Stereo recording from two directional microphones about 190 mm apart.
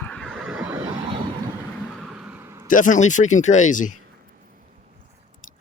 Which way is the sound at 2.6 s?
45° left (ahead or behind).